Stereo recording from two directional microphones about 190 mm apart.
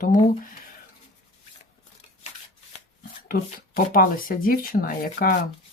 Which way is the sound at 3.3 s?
50° left (ahead or behind).